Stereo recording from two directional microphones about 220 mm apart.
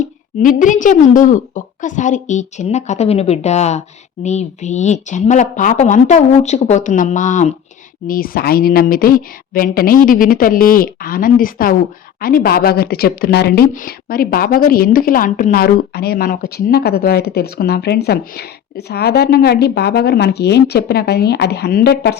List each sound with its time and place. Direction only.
0.3 s a woman's voice: 35° left (ahead or behind)